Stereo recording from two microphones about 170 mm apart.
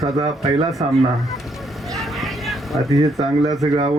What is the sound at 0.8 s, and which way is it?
Speech, 35° right (ahead or behind).